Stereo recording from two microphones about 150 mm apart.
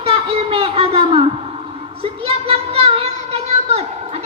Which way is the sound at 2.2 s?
40° right (ahead or behind).